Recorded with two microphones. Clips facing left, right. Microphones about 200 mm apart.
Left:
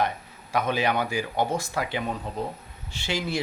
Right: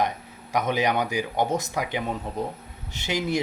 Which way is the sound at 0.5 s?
15° right (ahead or behind).